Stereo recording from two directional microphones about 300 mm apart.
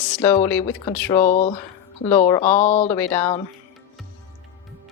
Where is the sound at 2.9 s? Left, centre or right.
Centre.